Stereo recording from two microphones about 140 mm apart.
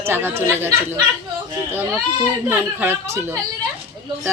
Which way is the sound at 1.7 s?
15° right (ahead or behind).